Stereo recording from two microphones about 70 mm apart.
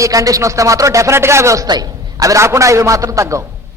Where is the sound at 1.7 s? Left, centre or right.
Right.